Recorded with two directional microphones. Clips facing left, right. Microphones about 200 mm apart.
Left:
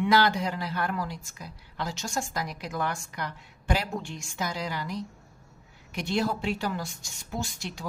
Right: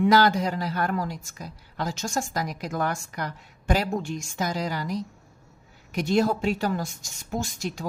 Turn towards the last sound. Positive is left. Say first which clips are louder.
# right 4 dB
turn(degrees=-40)  # may be behind; listen again after turning